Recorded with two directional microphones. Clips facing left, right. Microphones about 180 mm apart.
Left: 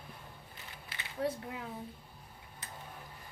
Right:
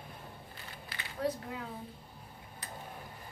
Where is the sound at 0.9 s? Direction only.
25° left (ahead or behind).